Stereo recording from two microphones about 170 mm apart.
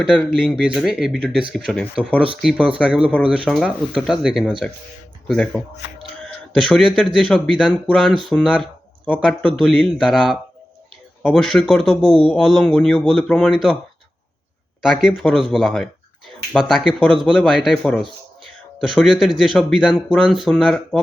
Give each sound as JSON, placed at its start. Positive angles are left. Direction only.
{"t": 0.0, "sound": "a man's voice", "side_deg": -5}
{"t": 2.4, "sound": "a man's voice", "side_deg": -5}
{"t": 9.6, "sound": "a man's voice", "side_deg": 0}
{"t": 14.8, "sound": "a man's voice", "side_deg": -5}